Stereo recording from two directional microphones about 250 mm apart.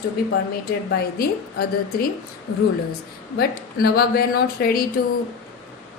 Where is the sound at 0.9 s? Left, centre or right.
Left.